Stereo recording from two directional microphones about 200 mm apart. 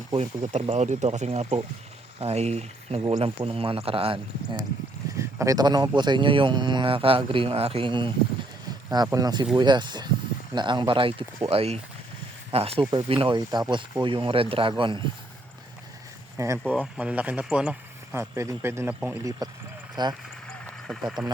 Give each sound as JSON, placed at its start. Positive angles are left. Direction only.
{"t": 0.1, "sound": "speech", "side_deg": -30}
{"t": 5.1, "sound": "speech", "side_deg": -15}
{"t": 16.4, "sound": "speech", "side_deg": -15}
{"t": 20.5, "sound": "a sound", "side_deg": 0}